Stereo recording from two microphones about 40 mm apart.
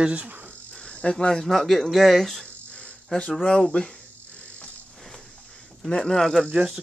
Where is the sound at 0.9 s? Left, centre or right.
Left.